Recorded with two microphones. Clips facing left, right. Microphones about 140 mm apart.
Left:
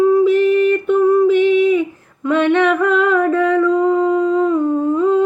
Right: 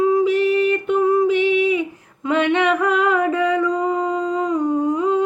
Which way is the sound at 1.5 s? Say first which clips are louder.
Left 5 dB; 50° left (ahead or behind).